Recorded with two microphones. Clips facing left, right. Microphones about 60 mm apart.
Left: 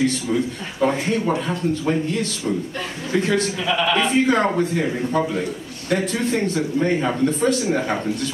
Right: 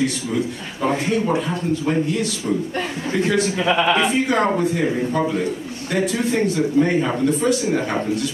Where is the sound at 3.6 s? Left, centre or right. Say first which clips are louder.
Right 4 dB; right.